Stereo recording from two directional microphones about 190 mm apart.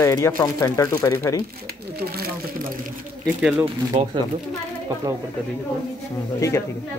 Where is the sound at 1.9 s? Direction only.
55° right (ahead or behind).